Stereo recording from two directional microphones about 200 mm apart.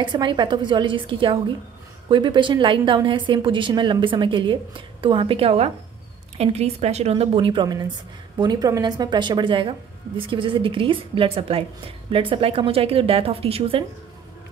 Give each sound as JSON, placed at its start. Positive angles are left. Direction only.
{"t": 0.0, "sound": "a woman's voice", "side_deg": -25}